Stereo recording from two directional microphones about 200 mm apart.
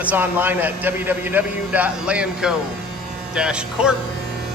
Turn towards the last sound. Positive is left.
turn(degrees=-5)  # may be behind; listen again after turning